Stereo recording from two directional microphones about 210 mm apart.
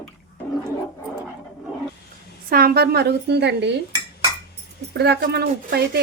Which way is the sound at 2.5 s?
45° right (ahead or behind).